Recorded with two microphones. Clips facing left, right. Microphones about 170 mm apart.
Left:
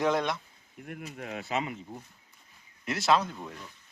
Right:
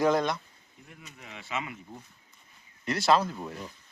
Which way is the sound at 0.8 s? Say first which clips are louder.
Left 10 dB; 60° left (ahead or behind).